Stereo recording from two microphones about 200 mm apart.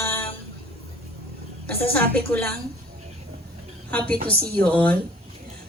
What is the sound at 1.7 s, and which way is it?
Speech, 10° left (ahead or behind).